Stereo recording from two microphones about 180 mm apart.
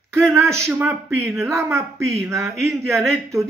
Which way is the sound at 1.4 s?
15° right (ahead or behind).